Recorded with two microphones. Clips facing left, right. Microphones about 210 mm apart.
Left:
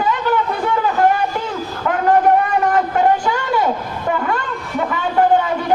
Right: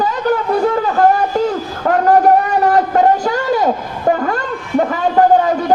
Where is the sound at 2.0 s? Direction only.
40° right (ahead or behind).